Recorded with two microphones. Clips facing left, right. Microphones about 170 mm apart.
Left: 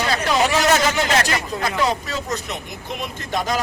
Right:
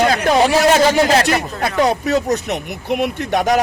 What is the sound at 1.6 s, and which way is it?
Speech, 65° right (ahead or behind).